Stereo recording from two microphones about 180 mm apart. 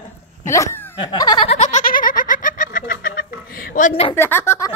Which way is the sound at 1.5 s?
40° left (ahead or behind).